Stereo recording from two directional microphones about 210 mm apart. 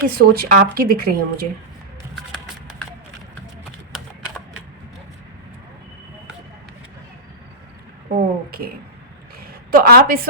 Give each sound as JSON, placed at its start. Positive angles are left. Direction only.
{"t": 0.0, "sound": "a woman's voice", "side_deg": -45}
{"t": 8.1, "sound": "a sound", "side_deg": -45}
{"t": 9.5, "sound": "a woman's voice", "side_deg": -45}